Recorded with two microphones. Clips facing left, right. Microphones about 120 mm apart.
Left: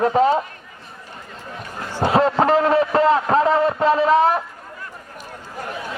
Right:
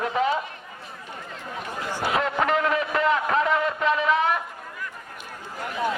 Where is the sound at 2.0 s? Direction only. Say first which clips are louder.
Left 8 dB; 35° left (ahead or behind).